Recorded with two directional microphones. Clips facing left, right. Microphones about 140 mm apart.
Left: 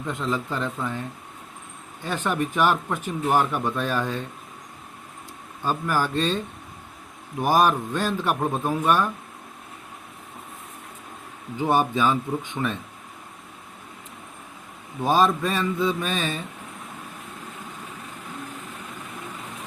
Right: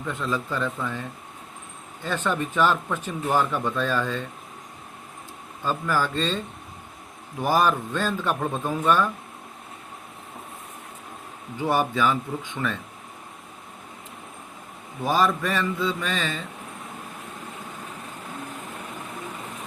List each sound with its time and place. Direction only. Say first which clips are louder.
0.1 s speech: left 1 dB; 15° left (ahead or behind)
2.0 s speech: left 1 dB; 15° left (ahead or behind)
5.6 s speech: even; 15° left (ahead or behind)
7.4 s speech: left 2 dB; 15° left (ahead or behind)
11.7 s speech: left 1 dB; 20° left (ahead or behind)
15.0 s speech: left 2 dB; 20° left (ahead or behind)